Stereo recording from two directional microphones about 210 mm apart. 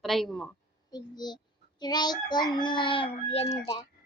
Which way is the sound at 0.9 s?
20° left (ahead or behind).